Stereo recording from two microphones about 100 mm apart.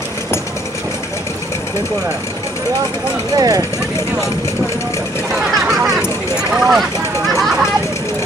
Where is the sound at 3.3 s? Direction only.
40° right (ahead or behind).